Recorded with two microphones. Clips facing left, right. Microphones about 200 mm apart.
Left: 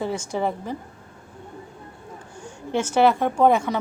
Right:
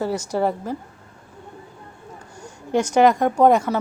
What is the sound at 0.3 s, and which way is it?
Speech, 10° right (ahead or behind).